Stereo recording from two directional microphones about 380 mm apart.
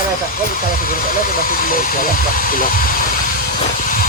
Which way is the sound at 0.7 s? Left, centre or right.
Left.